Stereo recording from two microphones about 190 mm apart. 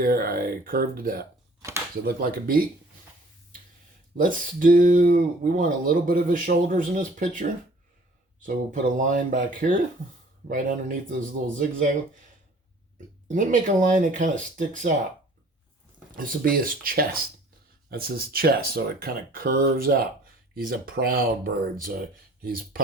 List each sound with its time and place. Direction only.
0.0 s speech: 50° right (ahead or behind)
1.6 s speech: 20° right (ahead or behind)
2.0 s speech: 50° right (ahead or behind)
4.2 s speech: 45° right (ahead or behind)
13.2 s speech: 45° right (ahead or behind)
16.1 s speech: 50° right (ahead or behind)